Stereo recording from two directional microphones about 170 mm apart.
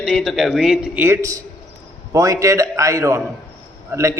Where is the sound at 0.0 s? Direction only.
5° right (ahead or behind).